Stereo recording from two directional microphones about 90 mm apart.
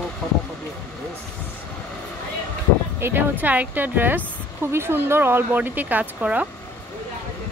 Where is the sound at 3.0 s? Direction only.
20° right (ahead or behind).